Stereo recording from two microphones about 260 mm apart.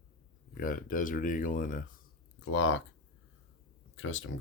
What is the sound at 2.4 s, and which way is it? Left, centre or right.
Speech, left.